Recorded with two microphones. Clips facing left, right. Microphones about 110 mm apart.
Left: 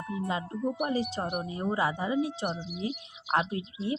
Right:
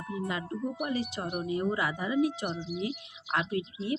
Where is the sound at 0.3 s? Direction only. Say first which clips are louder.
Left 4 dB; 30° left (ahead or behind).